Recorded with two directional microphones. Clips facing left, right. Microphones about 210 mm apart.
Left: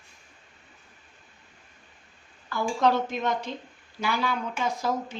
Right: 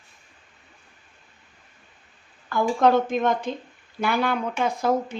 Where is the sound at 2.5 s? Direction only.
50° right (ahead or behind).